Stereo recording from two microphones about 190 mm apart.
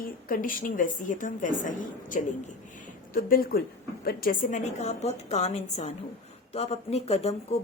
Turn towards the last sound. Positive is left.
turn(degrees=35)  # may be behind; listen again after turning